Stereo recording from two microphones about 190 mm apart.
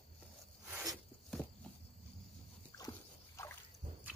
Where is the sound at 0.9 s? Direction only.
Centre (ahead or behind).